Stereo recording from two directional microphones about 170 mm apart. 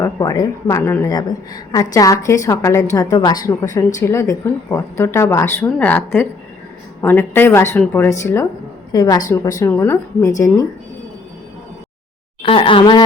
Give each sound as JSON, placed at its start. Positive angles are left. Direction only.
{"t": 0.0, "sound": "a woman's voice", "side_deg": 20}
{"t": 12.4, "sound": "speech", "side_deg": 30}